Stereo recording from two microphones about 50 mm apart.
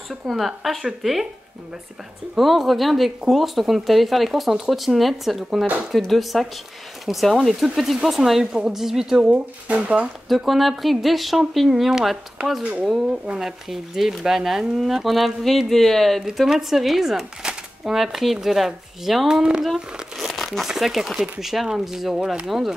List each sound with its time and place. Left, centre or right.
0.1 s speech: centre
2.3 s speech: centre
9.7 s speech: right
10.2 s speech: centre
13.4 s speech: centre
20.2 s speech: centre